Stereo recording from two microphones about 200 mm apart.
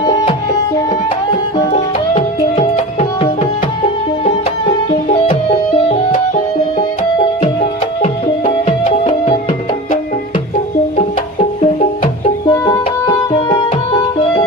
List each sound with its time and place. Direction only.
1.7 s tabla: 35° left (ahead or behind)
6.7 s music: 25° left (ahead or behind)
8.0 s music: 35° left (ahead or behind)
10.9 s music: 35° left (ahead or behind)
12.5 s music: 20° left (ahead or behind)